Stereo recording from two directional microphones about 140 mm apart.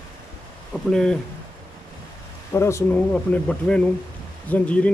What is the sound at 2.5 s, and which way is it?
Speech, 20° left (ahead or behind).